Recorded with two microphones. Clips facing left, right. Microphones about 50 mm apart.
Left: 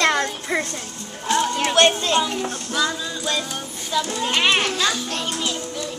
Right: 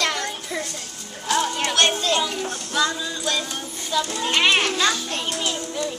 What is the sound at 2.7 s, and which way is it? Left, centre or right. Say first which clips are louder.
Music: right 1 dB; centre.